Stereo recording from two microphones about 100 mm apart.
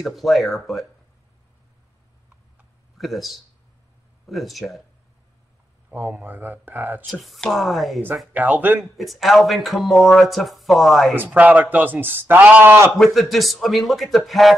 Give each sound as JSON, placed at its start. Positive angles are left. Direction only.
{"t": 0.0, "sound": "speech", "side_deg": 0}
{"t": 3.0, "sound": "speech", "side_deg": 0}
{"t": 5.9, "sound": "speech", "side_deg": -20}
{"t": 7.1, "sound": "speech", "side_deg": 0}
{"t": 8.3, "sound": "speech", "side_deg": -15}
{"t": 8.8, "sound": "speech", "side_deg": 0}
{"t": 11.3, "sound": "speech", "side_deg": -15}
{"t": 12.9, "sound": "speech", "side_deg": 0}